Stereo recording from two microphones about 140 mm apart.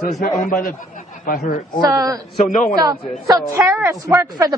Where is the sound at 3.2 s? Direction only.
20° right (ahead or behind).